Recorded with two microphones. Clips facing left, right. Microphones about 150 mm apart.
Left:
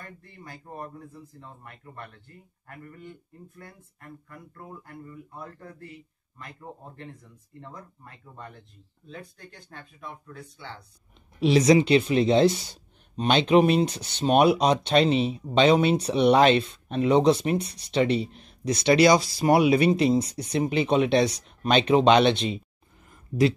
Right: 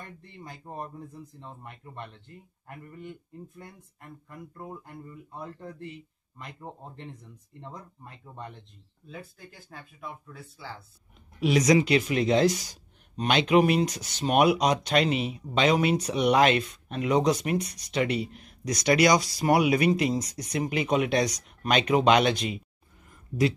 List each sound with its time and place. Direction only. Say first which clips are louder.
0.2 s speech: right 1 dB; 20° right (ahead or behind)
9.0 s speech: left 1 dB; 5° right (ahead or behind)
11.3 s speech: left 3 dB; 30° left (ahead or behind)